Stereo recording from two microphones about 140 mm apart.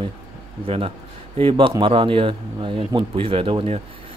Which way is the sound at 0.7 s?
40° right (ahead or behind).